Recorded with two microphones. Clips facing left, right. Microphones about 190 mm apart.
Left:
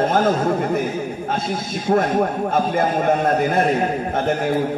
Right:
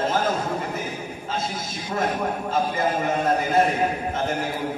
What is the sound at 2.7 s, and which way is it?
Speech, 55° left (ahead or behind).